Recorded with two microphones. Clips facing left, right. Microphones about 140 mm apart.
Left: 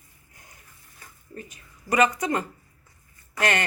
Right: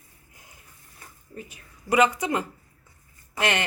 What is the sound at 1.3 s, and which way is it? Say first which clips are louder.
Speech: even; 10° right (ahead or behind).